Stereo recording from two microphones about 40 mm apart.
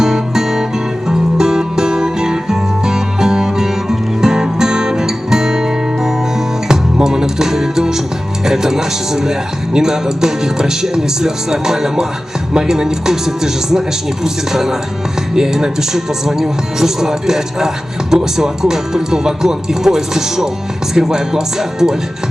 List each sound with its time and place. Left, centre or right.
0.0 s music: centre
8.4 s speech: centre